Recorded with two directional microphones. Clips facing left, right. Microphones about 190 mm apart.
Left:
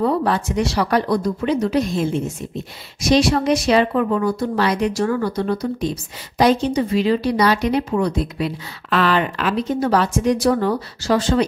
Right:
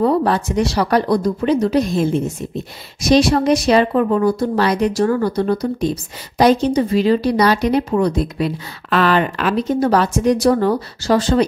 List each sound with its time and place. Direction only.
0.0 s speech: 40° right (ahead or behind)